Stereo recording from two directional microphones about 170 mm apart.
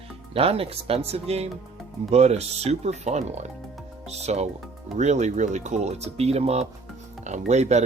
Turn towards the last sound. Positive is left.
turn(degrees=-40)  # may be behind; listen again after turning